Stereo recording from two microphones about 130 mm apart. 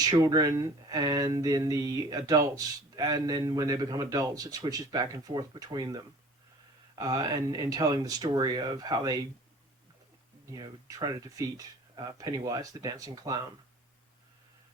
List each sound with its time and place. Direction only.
0.0 s speech: 30° right (ahead or behind)
7.0 s speech: 30° right (ahead or behind)
10.4 s speech: 30° right (ahead or behind)